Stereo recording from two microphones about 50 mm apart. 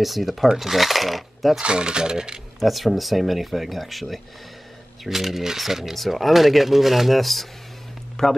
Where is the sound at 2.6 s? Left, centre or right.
Centre.